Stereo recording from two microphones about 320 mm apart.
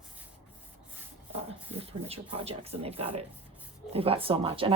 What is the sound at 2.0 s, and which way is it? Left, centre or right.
Speech, centre.